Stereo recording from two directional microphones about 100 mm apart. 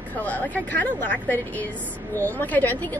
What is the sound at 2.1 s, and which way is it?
Speech, 15° left (ahead or behind).